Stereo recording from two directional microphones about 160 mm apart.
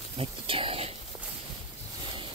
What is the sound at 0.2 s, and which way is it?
Speech, 35° right (ahead or behind).